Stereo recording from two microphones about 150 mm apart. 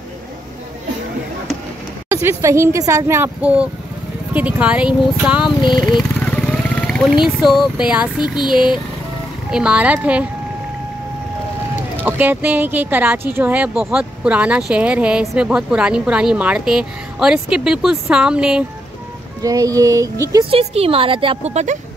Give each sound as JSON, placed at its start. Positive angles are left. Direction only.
{"t": 2.2, "sound": "speech", "side_deg": -20}
{"t": 5.6, "sound": "speech", "side_deg": 30}
{"t": 6.1, "sound": "wild animals", "side_deg": 10}
{"t": 7.7, "sound": "speech", "side_deg": -5}
{"t": 8.2, "sound": "a sound", "side_deg": 30}
{"t": 9.5, "sound": "speech", "side_deg": -5}
{"t": 12.0, "sound": "speech", "side_deg": -15}
{"t": 19.4, "sound": "speech", "side_deg": -25}
{"t": 20.4, "sound": "speech", "side_deg": -40}